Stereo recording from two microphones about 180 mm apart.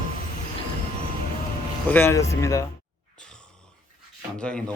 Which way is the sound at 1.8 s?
10° left (ahead or behind).